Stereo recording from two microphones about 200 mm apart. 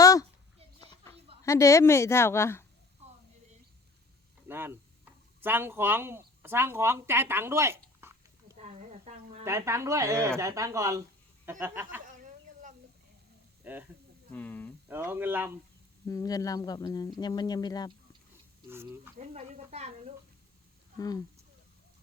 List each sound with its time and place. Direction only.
0.0 s a sound: 15° left (ahead or behind)
1.4 s a woman's voice: 15° left (ahead or behind)
4.4 s speech: 10° right (ahead or behind)
8.5 s a sound: 35° right (ahead or behind)
9.4 s speech: 15° right (ahead or behind)
12.0 s a sound: 40° right (ahead or behind)
13.7 s speech: 10° right (ahead or behind)
14.3 s a woman's voice: 10° left (ahead or behind)
14.8 s speech: 10° right (ahead or behind)
16.0 s speech: 15° left (ahead or behind)
19.2 s speech: 35° right (ahead or behind)